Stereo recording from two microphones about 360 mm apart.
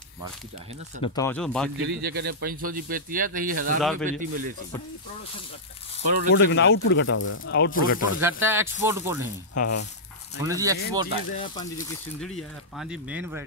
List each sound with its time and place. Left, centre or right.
1.0 s speech: centre
1.9 s speech: right
2.1 s speech: right
6.3 s speech: left
8.2 s speech: centre
9.5 s speech: left
10.4 s speech: centre
11.3 s speech: centre
12.2 s speech: centre